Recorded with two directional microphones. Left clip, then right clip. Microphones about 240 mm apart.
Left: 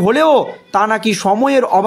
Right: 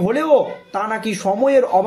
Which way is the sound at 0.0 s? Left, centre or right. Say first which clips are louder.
Left 4 dB; left.